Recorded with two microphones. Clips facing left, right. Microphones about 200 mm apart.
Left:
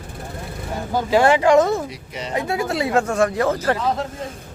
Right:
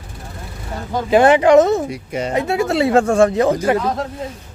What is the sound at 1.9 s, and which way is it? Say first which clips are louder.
Speech: right 8 dB; 50° right (ahead or behind).